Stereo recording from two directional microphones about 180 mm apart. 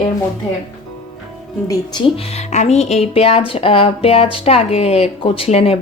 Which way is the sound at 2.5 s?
40° left (ahead or behind).